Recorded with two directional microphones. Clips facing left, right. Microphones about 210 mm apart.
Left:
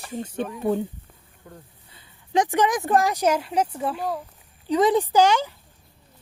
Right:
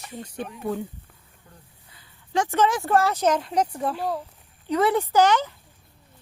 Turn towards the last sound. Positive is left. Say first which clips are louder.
# left 1 dB
turn(degrees=10)  # may be behind; listen again after turning